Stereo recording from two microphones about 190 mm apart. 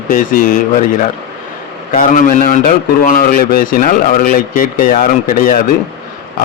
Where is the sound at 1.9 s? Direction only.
45° left (ahead or behind).